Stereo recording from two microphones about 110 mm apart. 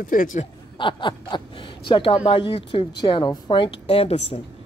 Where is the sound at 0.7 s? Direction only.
45° left (ahead or behind); by 4.4 s 65° left (ahead or behind).